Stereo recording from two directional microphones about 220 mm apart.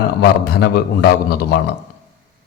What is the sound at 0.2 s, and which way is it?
A man's voice, 45° left (ahead or behind).